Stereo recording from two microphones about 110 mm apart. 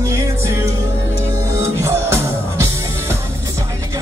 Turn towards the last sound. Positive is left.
turn(degrees=-25)  # may be behind; listen again after turning